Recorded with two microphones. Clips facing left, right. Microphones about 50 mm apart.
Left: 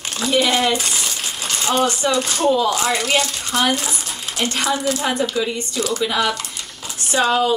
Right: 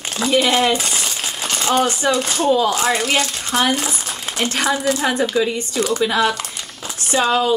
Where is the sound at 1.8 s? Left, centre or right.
Right.